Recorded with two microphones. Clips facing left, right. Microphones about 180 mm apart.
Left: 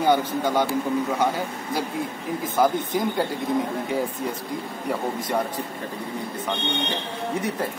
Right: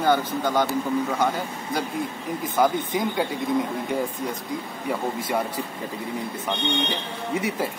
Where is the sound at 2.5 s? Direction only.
Centre (ahead or behind).